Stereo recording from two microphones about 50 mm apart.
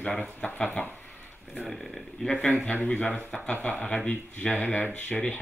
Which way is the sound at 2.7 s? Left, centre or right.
Left.